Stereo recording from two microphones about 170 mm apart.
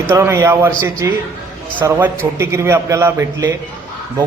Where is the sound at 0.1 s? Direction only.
15° right (ahead or behind).